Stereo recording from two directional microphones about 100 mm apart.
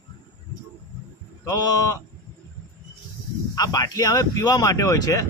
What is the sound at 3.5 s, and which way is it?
Speech, 40° left (ahead or behind).